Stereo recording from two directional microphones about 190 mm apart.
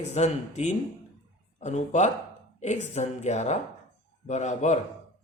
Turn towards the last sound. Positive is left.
turn(degrees=35)  # may be behind; listen again after turning